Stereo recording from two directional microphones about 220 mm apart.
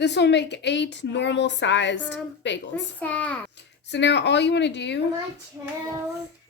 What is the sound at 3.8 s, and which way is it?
A woman's voice, 50° left (ahead or behind).